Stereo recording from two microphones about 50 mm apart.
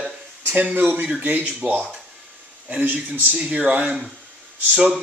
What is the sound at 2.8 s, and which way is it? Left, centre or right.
Speech, right.